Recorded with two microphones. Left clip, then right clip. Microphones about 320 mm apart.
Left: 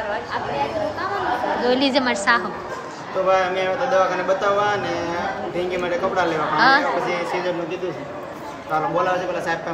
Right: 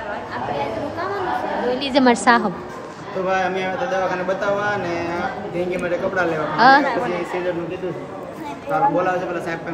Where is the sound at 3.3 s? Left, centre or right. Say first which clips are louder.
Left 2 dB; centre.